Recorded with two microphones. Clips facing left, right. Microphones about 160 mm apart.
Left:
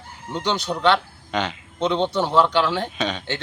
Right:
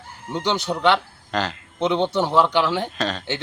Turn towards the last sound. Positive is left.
turn(degrees=0)  # may be behind; listen again after turning